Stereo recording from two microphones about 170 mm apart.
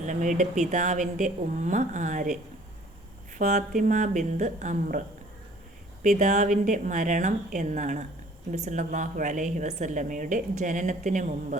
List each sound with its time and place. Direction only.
0.0 s a woman's voice: 45° right (ahead or behind)